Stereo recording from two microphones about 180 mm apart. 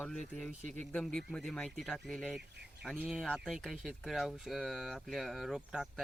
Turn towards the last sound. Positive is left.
turn(degrees=0)  # may be behind; listen again after turning